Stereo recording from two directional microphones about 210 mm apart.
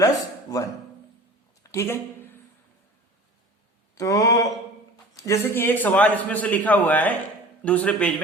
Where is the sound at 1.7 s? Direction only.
10° left (ahead or behind).